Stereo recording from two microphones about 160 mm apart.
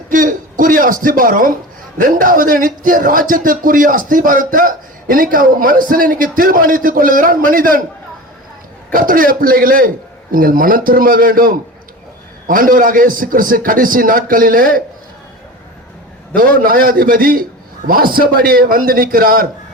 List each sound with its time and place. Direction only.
0.1 s a sound: 55° right (ahead or behind)
2.0 s speech: 60° right (ahead or behind)
8.9 s speech: 60° right (ahead or behind)
16.3 s speech: 65° right (ahead or behind)